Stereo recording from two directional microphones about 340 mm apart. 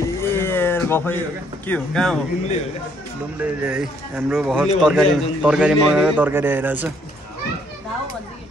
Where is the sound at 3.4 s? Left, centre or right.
Centre.